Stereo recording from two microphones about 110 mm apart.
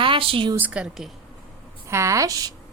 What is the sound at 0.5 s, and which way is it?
Speech, 15° right (ahead or behind).